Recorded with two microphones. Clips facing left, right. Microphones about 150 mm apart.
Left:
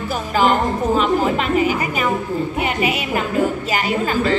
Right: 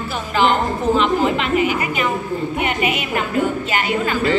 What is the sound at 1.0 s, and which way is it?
A woman's voice, 40° left (ahead or behind).